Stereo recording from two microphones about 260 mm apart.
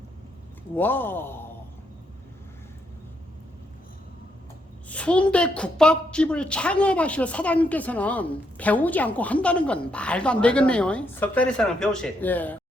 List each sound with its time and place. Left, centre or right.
0.8 s a man's voice: centre
4.9 s a woman's voice: centre